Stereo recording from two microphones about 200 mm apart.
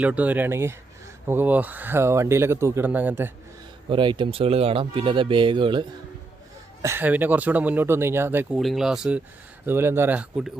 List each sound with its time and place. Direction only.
0.0 s speech: 5° right (ahead or behind)
3.8 s speech: 25° right (ahead or behind)
6.8 s speech: 10° right (ahead or behind)
8.5 s speech: centre (ahead or behind)